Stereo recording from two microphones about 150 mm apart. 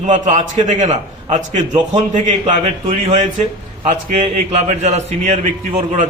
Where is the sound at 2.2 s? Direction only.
50° right (ahead or behind).